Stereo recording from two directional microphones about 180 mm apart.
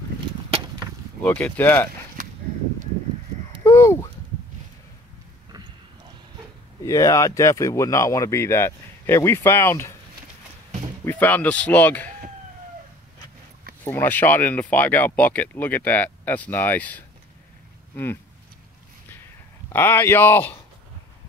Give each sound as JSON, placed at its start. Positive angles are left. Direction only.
{"t": 1.2, "sound": "speech", "side_deg": 10}
{"t": 3.6, "sound": "a sound", "side_deg": 15}
{"t": 6.8, "sound": "speech", "side_deg": 20}
{"t": 11.1, "sound": "speech", "side_deg": 10}
{"t": 13.8, "sound": "speech", "side_deg": 10}
{"t": 19.7, "sound": "speech", "side_deg": 10}